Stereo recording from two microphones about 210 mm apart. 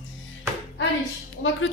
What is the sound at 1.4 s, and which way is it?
Speech, 60° left (ahead or behind).